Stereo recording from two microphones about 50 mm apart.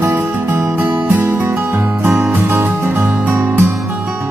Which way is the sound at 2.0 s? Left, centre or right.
Right.